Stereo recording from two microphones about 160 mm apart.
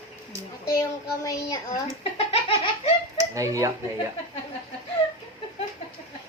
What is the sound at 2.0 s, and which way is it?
Giggle, 35° left (ahead or behind).